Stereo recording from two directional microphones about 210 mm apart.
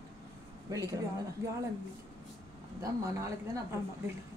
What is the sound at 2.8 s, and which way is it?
Speech, 15° right (ahead or behind).